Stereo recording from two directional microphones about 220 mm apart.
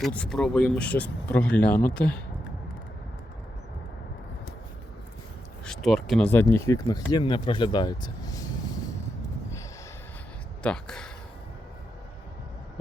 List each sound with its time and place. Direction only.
0.0 s speech: 5° left (ahead or behind)
5.6 s speech: centre (ahead or behind); by 8.7 s 15° left (ahead or behind)
10.6 s speech: 5° left (ahead or behind)